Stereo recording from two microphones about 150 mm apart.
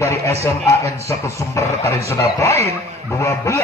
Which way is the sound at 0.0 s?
20° left (ahead or behind).